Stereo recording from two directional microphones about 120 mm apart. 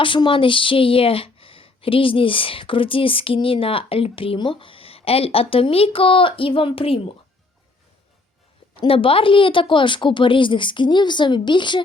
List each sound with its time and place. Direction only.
0.0 s speech: 45° left (ahead or behind)
8.9 s speech: 50° left (ahead or behind)